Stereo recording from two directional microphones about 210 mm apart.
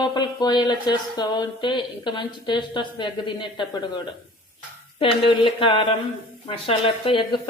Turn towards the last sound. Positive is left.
turn(degrees=25)  # may be behind; listen again after turning